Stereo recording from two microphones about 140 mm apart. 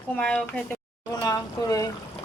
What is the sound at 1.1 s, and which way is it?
Speech, 25° left (ahead or behind).